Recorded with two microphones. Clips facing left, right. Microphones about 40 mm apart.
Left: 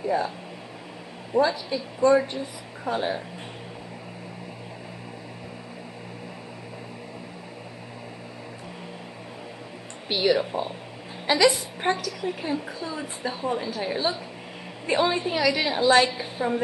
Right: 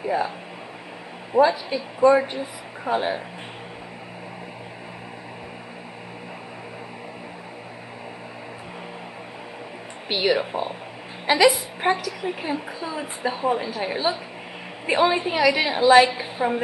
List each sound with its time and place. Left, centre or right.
0.0 s a sound: centre
1.3 s speech: centre
10.0 s a woman's voice: centre